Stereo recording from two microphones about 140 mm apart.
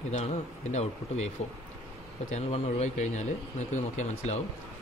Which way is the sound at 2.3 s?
55° left (ahead or behind).